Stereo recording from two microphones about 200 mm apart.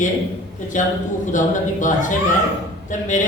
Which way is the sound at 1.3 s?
40° left (ahead or behind).